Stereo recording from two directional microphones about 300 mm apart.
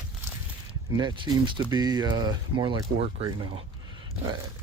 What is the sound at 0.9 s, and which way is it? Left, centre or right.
Speech, centre.